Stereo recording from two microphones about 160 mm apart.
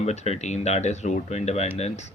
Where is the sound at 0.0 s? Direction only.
45° left (ahead or behind).